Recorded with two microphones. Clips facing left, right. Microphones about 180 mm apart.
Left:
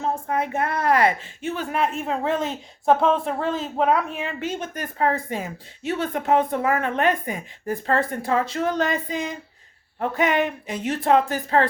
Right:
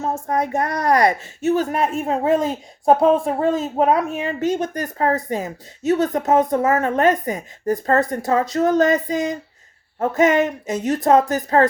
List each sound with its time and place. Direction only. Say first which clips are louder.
0.0 s speech: right 3 dB; 40° right (ahead or behind)